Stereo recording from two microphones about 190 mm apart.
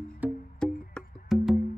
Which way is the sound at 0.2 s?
10° right (ahead or behind).